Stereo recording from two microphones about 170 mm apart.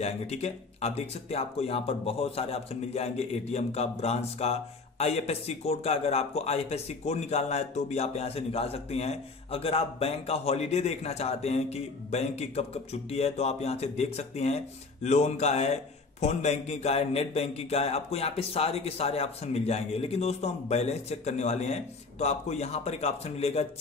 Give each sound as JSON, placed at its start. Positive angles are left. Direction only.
{"t": 0.0, "sound": "speech", "side_deg": 40}